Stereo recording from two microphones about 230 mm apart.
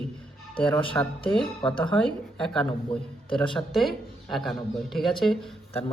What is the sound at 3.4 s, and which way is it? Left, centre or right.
Speech, left.